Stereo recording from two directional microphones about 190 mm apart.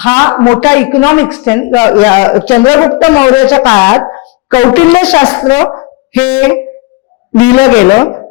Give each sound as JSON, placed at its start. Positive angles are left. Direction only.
{"t": 0.0, "sound": "a man's voice", "side_deg": 15}